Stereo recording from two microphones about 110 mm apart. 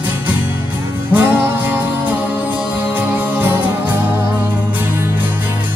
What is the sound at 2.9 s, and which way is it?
Music, 15° right (ahead or behind).